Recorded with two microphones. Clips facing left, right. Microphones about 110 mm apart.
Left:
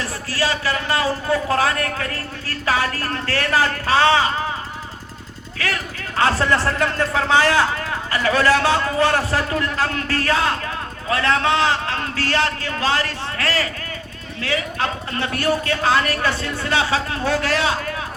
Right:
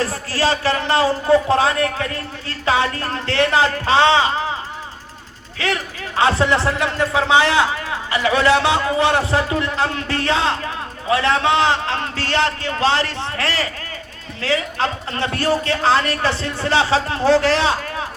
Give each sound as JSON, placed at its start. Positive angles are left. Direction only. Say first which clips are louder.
{"t": 0.0, "sound": "a man's voice", "louder": "right 4 dB", "side_deg": -30}
{"t": 5.5, "sound": "a man's voice", "louder": "right 3 dB", "side_deg": -25}